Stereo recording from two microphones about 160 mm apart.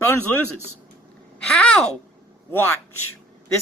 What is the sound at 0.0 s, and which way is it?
Speech, 15° left (ahead or behind).